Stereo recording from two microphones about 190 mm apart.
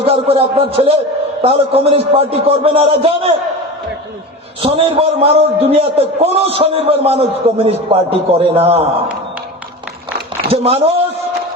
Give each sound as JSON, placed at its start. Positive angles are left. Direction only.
{"t": 0.0, "sound": "a man's voice", "side_deg": -30}
{"t": 4.6, "sound": "a man's voice", "side_deg": -30}
{"t": 10.5, "sound": "a man's voice", "side_deg": -30}